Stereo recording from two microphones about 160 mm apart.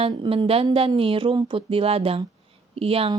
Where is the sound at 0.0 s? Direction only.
35° right (ahead or behind).